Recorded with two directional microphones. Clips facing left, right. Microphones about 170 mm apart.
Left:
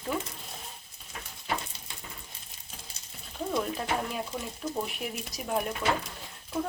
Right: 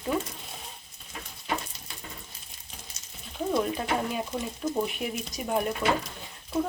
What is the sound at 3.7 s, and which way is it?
Speech, centre (ahead or behind).